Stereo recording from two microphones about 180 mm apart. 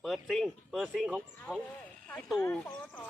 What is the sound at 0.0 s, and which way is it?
Speech, centre (ahead or behind).